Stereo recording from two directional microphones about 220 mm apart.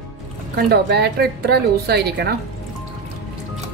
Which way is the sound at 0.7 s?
45° right (ahead or behind).